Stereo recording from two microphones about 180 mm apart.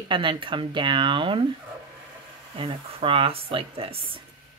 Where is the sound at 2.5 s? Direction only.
30° right (ahead or behind).